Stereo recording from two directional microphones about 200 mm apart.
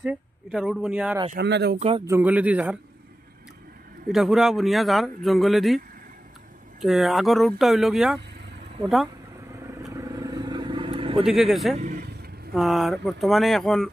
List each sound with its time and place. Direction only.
0.0 s a sound: 5° right (ahead or behind)
1.3 s speech: 55° right (ahead or behind)
1.8 s speech: 30° right (ahead or behind)
2.0 s speech: 10° right (ahead or behind)
4.1 s speech: centre (ahead or behind)
6.8 s speech: centre (ahead or behind)
9.9 s vehicle: 15° right (ahead or behind)
11.2 s speech: centre (ahead or behind)
11.7 s vehicle: 40° right (ahead or behind)
12.5 s speech: centre (ahead or behind)